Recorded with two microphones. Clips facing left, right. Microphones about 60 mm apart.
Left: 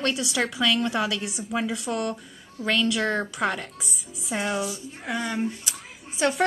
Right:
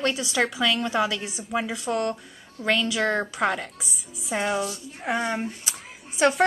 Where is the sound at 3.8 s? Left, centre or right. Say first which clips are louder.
Left 1 dB; centre.